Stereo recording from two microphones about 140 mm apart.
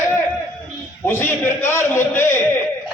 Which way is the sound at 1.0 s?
15° left (ahead or behind).